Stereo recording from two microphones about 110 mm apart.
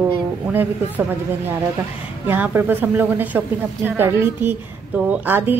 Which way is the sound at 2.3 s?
20° right (ahead or behind).